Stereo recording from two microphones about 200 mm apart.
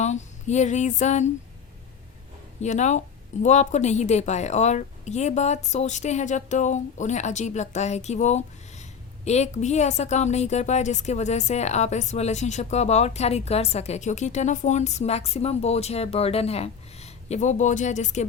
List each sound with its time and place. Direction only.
0.0 s a woman's voice: 35° left (ahead or behind)
2.6 s a woman's voice: 35° left (ahead or behind)